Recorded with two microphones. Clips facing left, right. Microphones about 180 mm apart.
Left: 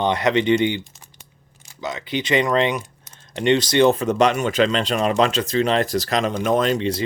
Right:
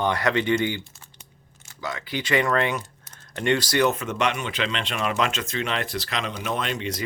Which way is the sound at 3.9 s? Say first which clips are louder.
Left 8 dB; 35° left (ahead or behind).